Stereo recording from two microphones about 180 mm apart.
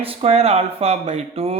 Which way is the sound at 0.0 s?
35° right (ahead or behind).